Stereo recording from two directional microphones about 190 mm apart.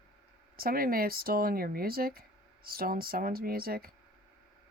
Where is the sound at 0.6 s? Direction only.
50° right (ahead or behind).